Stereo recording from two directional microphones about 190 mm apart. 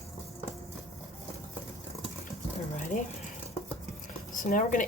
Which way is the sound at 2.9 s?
45° left (ahead or behind).